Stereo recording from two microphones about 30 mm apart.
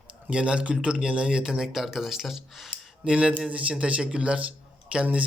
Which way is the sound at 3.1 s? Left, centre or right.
Right.